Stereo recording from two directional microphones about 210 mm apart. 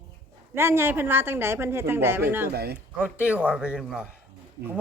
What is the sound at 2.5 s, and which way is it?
Speech, 50° right (ahead or behind).